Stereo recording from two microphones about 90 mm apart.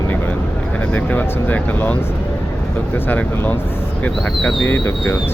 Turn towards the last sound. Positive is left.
turn(degrees=25)  # may be behind; listen again after turning